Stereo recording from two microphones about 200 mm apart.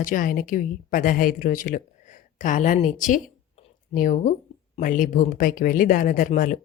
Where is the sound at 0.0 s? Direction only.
40° left (ahead or behind).